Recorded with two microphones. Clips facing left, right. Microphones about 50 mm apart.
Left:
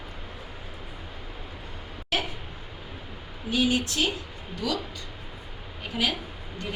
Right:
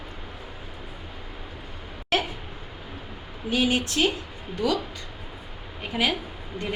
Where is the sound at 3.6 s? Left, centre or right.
Centre.